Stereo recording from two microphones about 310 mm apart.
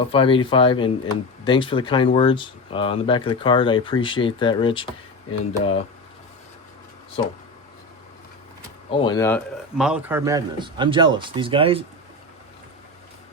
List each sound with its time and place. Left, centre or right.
0.0 s speech: centre
7.2 s speech: centre
8.9 s a man's voice: centre